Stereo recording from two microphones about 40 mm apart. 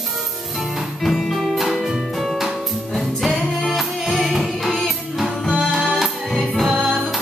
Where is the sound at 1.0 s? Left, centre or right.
Centre.